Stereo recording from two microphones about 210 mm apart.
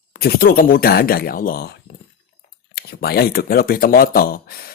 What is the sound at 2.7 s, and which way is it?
Speech, 45° left (ahead or behind).